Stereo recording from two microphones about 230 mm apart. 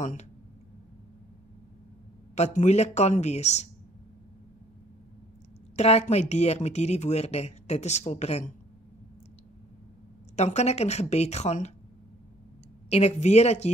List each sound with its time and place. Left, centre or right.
0.0 s speech: left
2.3 s speech: left
5.8 s speech: left
10.3 s speech: left
12.9 s speech: left